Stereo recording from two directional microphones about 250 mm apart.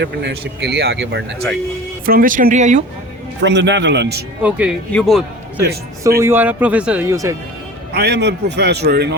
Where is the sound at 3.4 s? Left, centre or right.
Right.